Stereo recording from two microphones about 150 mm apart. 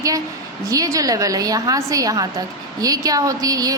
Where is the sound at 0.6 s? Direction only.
20° right (ahead or behind).